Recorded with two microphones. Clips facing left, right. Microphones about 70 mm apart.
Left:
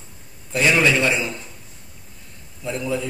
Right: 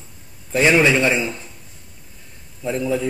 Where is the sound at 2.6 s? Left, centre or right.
Right.